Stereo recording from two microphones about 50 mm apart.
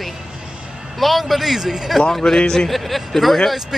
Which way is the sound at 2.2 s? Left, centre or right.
Centre.